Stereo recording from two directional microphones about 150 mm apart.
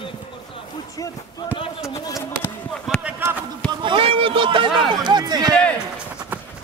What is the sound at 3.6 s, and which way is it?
Speech, 35° right (ahead or behind).